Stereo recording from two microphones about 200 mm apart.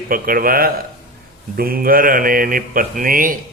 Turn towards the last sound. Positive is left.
turn(degrees=-45)  # may be behind; listen again after turning